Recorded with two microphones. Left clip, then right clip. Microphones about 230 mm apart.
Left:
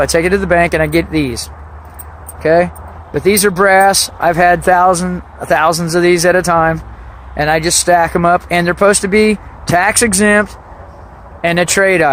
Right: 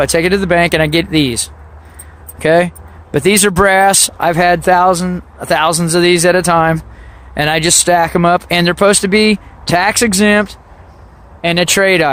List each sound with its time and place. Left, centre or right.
0.0 s speech: right
2.4 s speech: right